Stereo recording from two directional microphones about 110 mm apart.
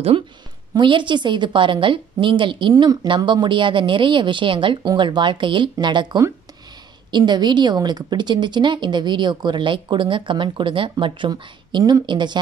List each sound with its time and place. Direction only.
0.7 s a woman's voice: 45° right (ahead or behind)
2.7 s a woman's voice: 35° right (ahead or behind)